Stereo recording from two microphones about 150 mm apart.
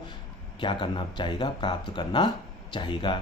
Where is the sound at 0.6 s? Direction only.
35° left (ahead or behind).